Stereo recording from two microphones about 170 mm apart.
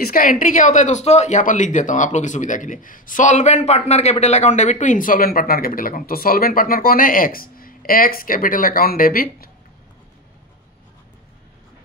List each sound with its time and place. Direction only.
0.0 s speech: 55° left (ahead or behind)